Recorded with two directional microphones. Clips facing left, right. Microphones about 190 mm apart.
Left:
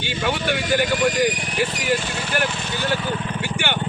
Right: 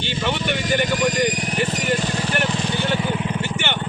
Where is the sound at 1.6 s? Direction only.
45° right (ahead or behind); by 3.3 s 15° right (ahead or behind).